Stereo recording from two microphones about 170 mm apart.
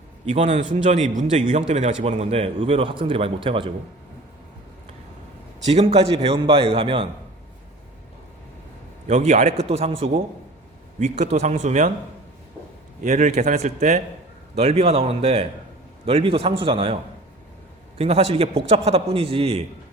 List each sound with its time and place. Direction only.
0.3 s a man's voice: 45° right (ahead or behind)
5.6 s a man's voice: 35° right (ahead or behind)
9.0 s a man's voice: 45° right (ahead or behind)
13.0 s a man's voice: 45° right (ahead or behind)